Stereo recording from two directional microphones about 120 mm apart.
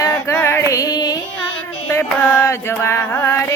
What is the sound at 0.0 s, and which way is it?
Female singing, 20° left (ahead or behind).